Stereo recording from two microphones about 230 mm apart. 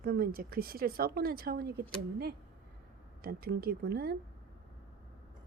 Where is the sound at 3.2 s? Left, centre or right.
Right.